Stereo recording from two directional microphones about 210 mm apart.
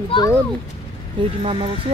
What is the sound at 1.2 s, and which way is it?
Speech, 25° right (ahead or behind).